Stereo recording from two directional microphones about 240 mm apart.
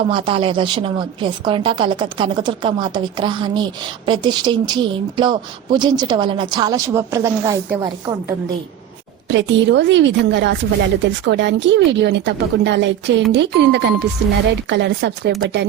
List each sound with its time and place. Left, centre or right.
0.1 s a woman's voice: right
9.3 s speech: right